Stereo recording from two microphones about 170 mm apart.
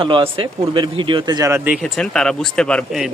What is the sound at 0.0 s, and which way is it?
Speech, 30° right (ahead or behind).